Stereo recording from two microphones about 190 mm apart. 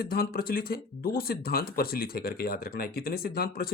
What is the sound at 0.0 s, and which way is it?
Speech, 50° left (ahead or behind).